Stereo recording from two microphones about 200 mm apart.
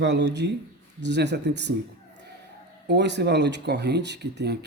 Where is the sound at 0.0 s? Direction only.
60° right (ahead or behind).